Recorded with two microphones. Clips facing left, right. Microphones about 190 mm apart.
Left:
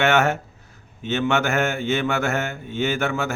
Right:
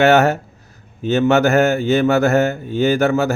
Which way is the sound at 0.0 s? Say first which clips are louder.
Right 6 dB; 35° right (ahead or behind).